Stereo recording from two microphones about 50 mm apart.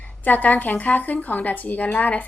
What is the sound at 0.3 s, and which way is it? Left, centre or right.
Speech, left.